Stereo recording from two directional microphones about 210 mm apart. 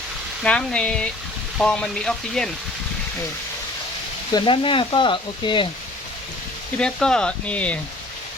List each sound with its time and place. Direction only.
0.4 s speech: 5° left (ahead or behind)
4.4 s speech: 25° left (ahead or behind)
6.7 s speech: 5° left (ahead or behind)